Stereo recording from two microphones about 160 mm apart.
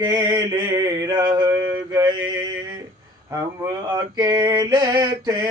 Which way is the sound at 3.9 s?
25° right (ahead or behind).